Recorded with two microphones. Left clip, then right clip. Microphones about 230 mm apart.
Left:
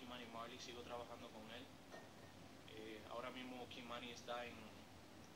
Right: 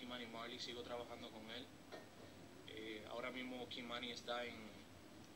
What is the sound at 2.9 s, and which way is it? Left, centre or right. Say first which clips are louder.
A man's voice: right 3 dB; centre.